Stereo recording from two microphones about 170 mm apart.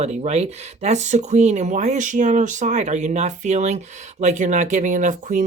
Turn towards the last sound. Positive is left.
turn(degrees=-45)  # may be behind; listen again after turning